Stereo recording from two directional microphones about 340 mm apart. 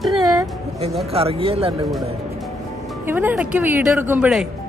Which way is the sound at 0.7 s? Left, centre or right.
Centre.